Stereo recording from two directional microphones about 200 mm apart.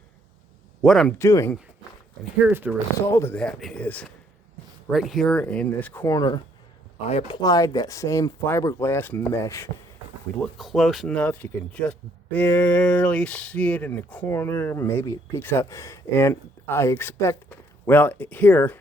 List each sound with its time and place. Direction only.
0.8 s speech: centre (ahead or behind)
1.2 s speech: 15° left (ahead or behind)
2.4 s speech: 10° right (ahead or behind)
3.1 s speech: 15° left (ahead or behind)
7.0 s speech: 30° left (ahead or behind)
7.4 s speech: 20° left (ahead or behind)
10.4 s speech: centre (ahead or behind)